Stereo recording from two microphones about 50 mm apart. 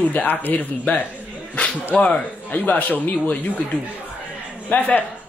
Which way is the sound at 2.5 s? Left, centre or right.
Left.